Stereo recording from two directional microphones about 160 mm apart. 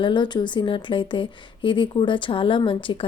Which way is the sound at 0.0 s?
30° left (ahead or behind).